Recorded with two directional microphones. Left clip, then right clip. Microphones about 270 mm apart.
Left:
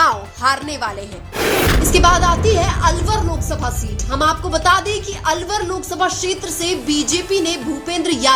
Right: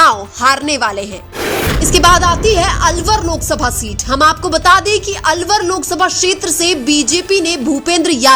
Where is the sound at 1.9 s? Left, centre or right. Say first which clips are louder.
Right 5 dB; right.